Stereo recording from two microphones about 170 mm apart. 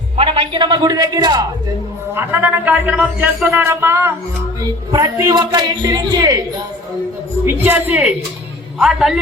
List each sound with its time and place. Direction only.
0.2 s a woman's voice: 30° right (ahead or behind)
2.1 s a man's voice: 10° right (ahead or behind)
7.4 s a man's voice: 10° right (ahead or behind)